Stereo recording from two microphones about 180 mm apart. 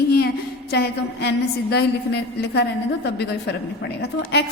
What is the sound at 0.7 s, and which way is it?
A woman's voice, 65° left (ahead or behind).